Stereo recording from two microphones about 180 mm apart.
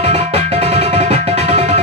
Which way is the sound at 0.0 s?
35° right (ahead or behind).